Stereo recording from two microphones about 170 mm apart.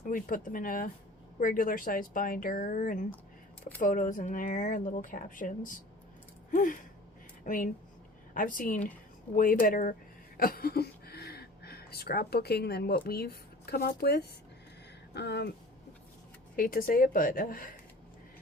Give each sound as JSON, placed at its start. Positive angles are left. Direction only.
{"t": 0.1, "sound": "speech", "side_deg": 55}
{"t": 10.3, "sound": "a sound", "side_deg": 60}
{"t": 13.1, "sound": "speech", "side_deg": 65}
{"t": 16.6, "sound": "speech", "side_deg": 55}